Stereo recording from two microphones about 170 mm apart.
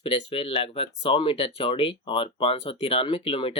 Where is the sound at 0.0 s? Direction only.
35° left (ahead or behind).